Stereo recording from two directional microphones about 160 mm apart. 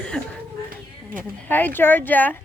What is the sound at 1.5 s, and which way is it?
Speech, 10° left (ahead or behind).